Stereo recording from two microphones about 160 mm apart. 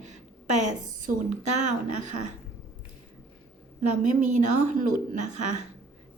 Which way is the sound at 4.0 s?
50° right (ahead or behind).